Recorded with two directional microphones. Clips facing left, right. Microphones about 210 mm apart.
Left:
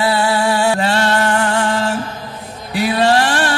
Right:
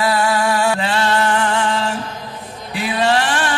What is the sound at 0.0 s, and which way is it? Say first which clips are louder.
Music: left 1 dB; 25° left (ahead or behind).